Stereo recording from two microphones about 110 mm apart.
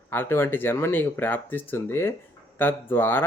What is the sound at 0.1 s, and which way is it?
Speech, 20° left (ahead or behind).